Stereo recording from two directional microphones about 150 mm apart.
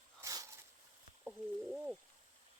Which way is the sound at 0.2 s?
20° right (ahead or behind).